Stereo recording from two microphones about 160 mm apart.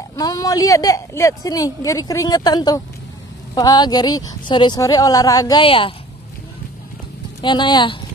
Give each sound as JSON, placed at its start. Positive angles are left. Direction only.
{"t": 0.1, "sound": "a woman's voice", "side_deg": 25}
{"t": 5.6, "sound": "a woman's voice", "side_deg": 35}
{"t": 7.4, "sound": "a woman's voice", "side_deg": 30}